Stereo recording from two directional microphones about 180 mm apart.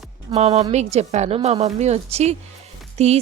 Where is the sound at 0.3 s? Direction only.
35° right (ahead or behind).